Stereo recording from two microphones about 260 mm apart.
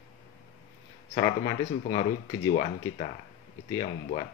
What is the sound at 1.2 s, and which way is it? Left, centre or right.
Speech, centre.